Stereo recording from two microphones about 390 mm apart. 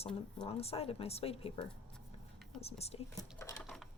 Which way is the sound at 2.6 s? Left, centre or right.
Centre.